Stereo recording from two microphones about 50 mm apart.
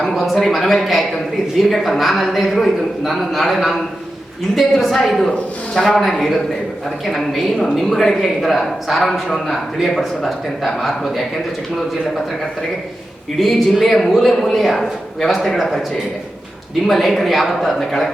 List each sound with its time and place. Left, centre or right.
0.1 s a woman's voice: centre
13.4 s a woman's voice: centre
16.8 s a woman's voice: centre